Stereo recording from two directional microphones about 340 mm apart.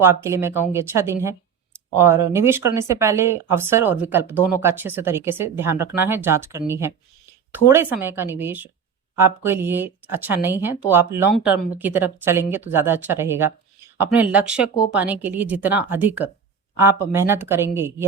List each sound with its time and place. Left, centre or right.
0.0 s speech: centre